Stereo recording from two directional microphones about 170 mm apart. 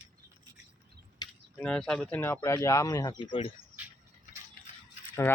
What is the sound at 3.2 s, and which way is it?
Speech, 30° left (ahead or behind).